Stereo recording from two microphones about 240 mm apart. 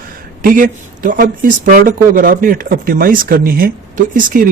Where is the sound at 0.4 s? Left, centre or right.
Right.